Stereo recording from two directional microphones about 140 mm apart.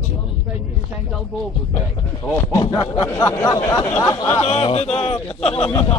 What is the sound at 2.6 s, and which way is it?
Snicker, 35° left (ahead or behind).